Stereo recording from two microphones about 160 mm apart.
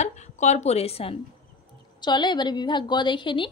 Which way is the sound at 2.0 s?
30° left (ahead or behind).